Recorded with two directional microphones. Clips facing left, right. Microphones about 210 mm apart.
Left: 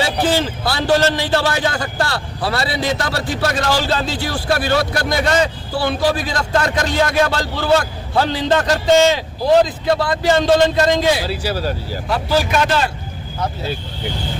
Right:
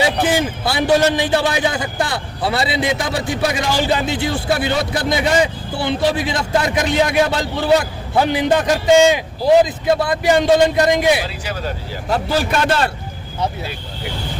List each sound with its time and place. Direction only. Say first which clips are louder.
0.3 s a man's voice: even; 20° right (ahead or behind)
11.4 s speech: left 4 dB; 35° left (ahead or behind)
12.6 s speech: right 1 dB; 55° right (ahead or behind)